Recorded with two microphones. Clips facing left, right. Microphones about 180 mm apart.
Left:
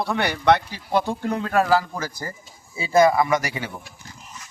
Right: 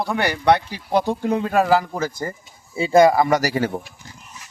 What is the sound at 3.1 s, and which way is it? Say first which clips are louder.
Speech: right 3 dB; 35° right (ahead or behind).